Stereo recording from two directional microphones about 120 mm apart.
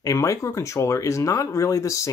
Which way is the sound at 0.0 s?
25° left (ahead or behind).